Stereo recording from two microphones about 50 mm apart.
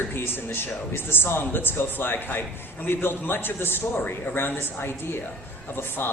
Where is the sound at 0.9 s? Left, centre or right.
Left.